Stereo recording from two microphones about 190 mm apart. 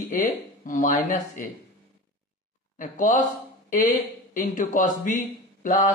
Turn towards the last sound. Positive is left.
turn(degrees=45)  # may be behind; listen again after turning